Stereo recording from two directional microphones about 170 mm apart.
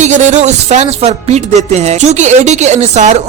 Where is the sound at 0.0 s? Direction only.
45° right (ahead or behind).